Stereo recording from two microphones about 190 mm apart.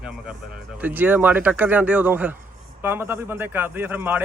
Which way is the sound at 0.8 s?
10° right (ahead or behind).